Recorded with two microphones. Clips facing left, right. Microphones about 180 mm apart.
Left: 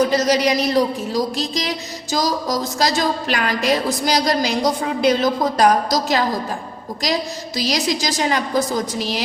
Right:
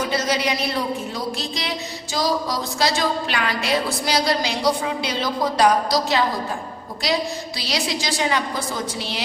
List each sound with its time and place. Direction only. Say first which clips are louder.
0.0 s a woman's voice: left 6 dB; 40° left (ahead or behind)